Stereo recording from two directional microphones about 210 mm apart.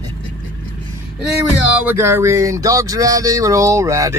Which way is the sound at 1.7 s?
10° right (ahead or behind).